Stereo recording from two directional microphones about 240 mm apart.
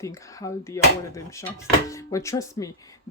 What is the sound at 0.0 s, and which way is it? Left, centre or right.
Speech, centre.